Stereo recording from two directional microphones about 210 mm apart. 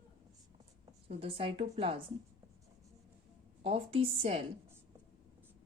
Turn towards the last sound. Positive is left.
turn(degrees=-30)  # may be behind; listen again after turning